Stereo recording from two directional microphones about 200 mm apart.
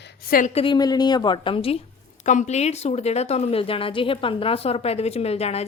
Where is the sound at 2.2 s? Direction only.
35° left (ahead or behind).